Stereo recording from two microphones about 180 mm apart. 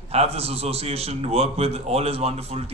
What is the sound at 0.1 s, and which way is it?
Speech, 35° right (ahead or behind).